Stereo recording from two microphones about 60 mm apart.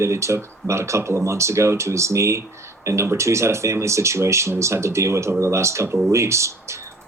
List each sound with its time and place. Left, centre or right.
0.0 s speech: right